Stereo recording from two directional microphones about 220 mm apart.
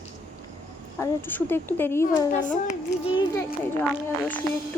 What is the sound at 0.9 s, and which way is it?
Speech, 10° left (ahead or behind).